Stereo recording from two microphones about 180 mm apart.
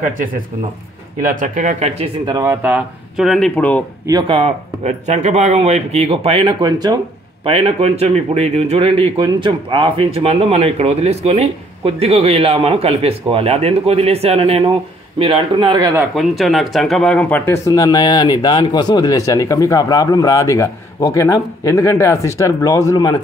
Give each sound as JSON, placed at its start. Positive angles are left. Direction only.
{"t": 0.0, "sound": "speech", "side_deg": -50}
{"t": 2.2, "sound": "speech", "side_deg": -20}
{"t": 4.3, "sound": "speech", "side_deg": -35}
{"t": 16.2, "sound": "speech", "side_deg": 0}